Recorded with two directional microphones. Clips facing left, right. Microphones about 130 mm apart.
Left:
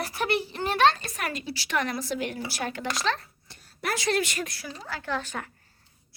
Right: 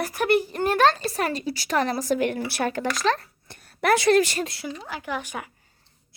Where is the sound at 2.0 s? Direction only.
50° right (ahead or behind).